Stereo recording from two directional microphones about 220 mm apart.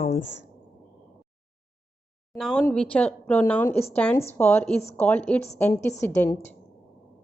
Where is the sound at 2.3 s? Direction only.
Centre (ahead or behind).